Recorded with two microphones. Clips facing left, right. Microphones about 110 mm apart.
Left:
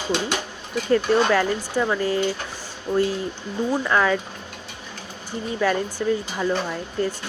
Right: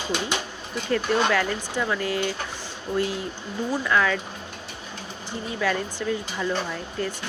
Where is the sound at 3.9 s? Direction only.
30° left (ahead or behind).